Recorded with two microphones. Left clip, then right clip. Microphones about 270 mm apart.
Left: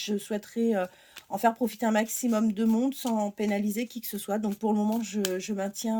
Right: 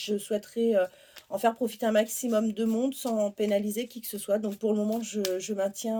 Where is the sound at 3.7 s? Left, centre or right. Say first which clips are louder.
Even; left.